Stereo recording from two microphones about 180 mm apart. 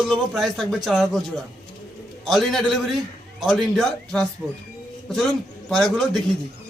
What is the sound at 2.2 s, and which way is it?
A man's voice, centre (ahead or behind).